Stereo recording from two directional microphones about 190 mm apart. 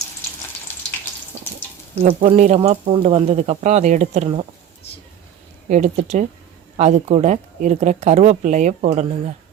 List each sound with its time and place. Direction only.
0.7 s frying: 10° left (ahead or behind)
2.2 s speech: 40° right (ahead or behind)
2.6 s speech: 25° right (ahead or behind)
5.6 s speech: 40° right (ahead or behind)